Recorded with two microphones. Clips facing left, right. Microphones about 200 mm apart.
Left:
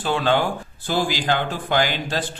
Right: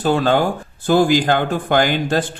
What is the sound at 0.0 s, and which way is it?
A man's voice, 45° right (ahead or behind).